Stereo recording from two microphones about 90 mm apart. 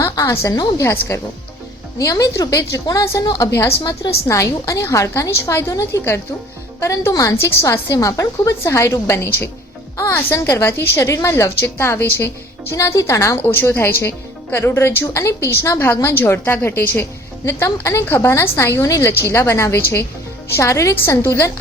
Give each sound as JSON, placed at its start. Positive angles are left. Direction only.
{"t": 0.0, "sound": "a woman's voice", "side_deg": 40}
{"t": 0.8, "sound": "a woman's voice", "side_deg": 30}
{"t": 7.3, "sound": "a woman's voice", "side_deg": 25}
{"t": 10.6, "sound": "a woman's voice", "side_deg": 25}
{"t": 13.3, "sound": "a woman's voice", "side_deg": 25}